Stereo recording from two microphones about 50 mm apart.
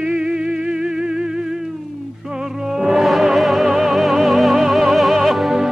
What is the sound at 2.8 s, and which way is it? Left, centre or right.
Music, centre.